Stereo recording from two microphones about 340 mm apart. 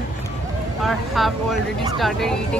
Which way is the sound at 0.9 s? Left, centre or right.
Centre.